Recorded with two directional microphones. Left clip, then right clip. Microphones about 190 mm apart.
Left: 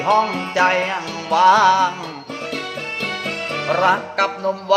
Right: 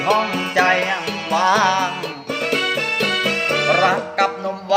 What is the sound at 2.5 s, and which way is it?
Music, 40° right (ahead or behind).